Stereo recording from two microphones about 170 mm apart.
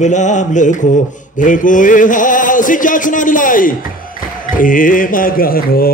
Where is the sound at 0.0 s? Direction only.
45° left (ahead or behind).